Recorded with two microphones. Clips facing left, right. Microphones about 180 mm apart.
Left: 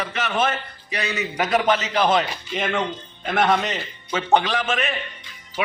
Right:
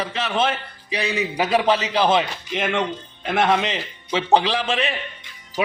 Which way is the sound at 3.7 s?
30° right (ahead or behind).